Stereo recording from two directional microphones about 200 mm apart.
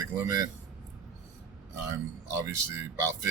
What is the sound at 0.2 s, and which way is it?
Speech, 15° right (ahead or behind).